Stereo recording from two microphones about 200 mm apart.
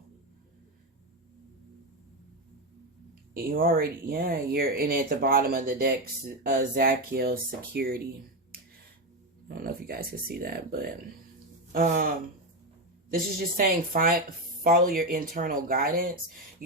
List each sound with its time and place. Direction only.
3.3 s speech: 45° right (ahead or behind)
9.5 s speech: 50° right (ahead or behind)